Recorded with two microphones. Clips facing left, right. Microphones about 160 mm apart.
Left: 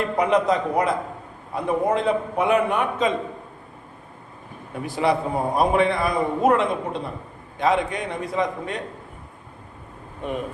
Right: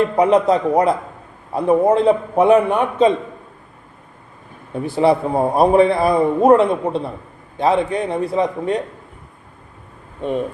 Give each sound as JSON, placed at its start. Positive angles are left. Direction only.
{"t": 0.2, "sound": "a man's voice", "side_deg": -35}
{"t": 4.9, "sound": "a man's voice", "side_deg": -30}